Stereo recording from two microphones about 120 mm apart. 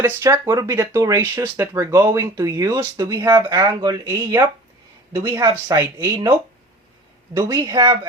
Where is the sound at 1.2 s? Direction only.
20° right (ahead or behind); by 5.4 s 40° right (ahead or behind).